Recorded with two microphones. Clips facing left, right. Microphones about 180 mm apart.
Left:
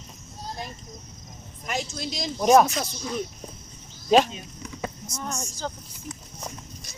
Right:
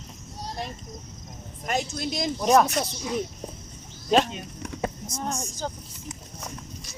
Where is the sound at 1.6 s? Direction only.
55° right (ahead or behind).